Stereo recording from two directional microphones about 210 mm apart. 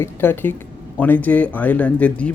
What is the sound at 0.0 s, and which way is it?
Speech, 10° left (ahead or behind).